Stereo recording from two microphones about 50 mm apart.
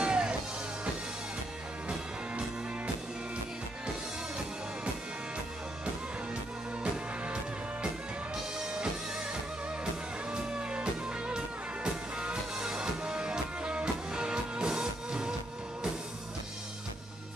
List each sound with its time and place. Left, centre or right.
0.0 s music: centre
10.3 s music: centre